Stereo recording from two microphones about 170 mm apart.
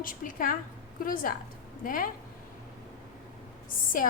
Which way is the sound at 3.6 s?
55° left (ahead or behind).